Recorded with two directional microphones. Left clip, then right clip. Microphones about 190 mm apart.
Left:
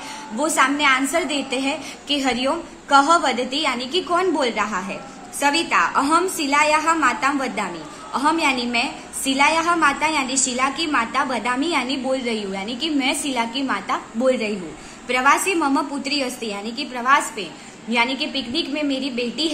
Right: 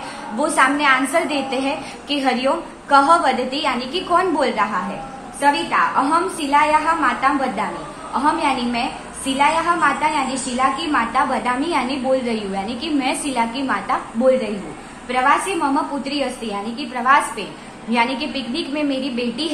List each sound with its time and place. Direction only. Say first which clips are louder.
0.4 s a woman's voice: right 2 dB; 25° left (ahead or behind)